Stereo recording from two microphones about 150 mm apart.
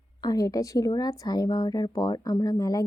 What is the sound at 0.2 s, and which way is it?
A woman's voice, 25° left (ahead or behind).